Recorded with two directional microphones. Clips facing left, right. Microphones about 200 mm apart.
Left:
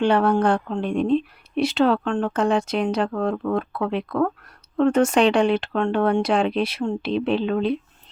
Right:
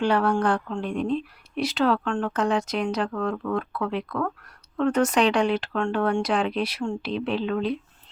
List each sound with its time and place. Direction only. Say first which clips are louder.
0.0 s speech: left 4 dB; 25° left (ahead or behind)